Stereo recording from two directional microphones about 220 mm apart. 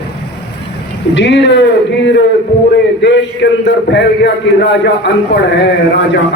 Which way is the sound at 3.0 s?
55° left (ahead or behind).